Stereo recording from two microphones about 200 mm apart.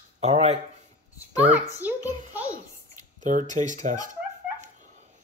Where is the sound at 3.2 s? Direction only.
40° right (ahead or behind).